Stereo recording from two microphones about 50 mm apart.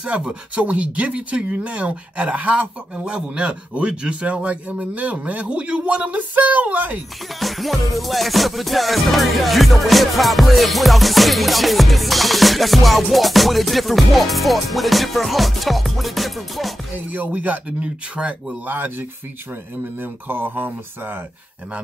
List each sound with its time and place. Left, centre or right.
0.0 s speech: centre
7.3 s music: centre
17.1 s music: right
17.6 s speech: right
18.7 s music: right
20.0 s speech: right